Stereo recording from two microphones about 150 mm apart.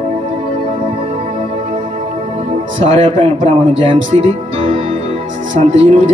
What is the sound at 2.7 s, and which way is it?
Speech, 35° right (ahead or behind).